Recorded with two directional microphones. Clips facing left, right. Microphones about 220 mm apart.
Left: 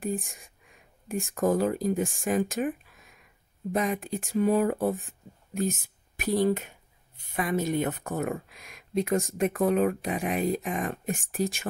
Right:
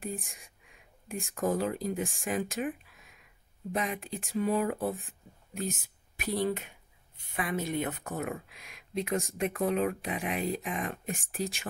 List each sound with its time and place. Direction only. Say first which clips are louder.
0.0 s speech: left 7 dB; 45° left (ahead or behind)
3.7 s speech: left 6 dB; 45° left (ahead or behind)